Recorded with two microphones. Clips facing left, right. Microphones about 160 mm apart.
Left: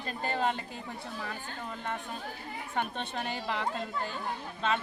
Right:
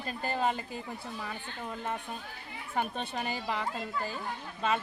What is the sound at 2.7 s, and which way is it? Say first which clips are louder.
A woman's voice: right 1 dB; 5° right (ahead or behind).